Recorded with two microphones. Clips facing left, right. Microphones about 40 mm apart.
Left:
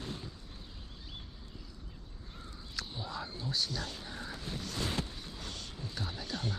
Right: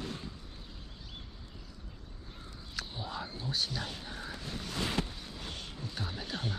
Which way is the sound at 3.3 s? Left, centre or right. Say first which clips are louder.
Even; right.